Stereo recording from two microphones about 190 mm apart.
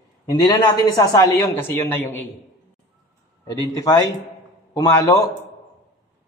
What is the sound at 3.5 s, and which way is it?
A man's voice, 20° left (ahead or behind).